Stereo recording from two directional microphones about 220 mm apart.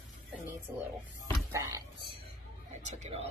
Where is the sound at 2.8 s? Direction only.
30° right (ahead or behind).